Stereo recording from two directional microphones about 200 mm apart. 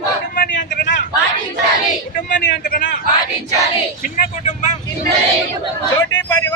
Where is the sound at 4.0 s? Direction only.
40° left (ahead or behind).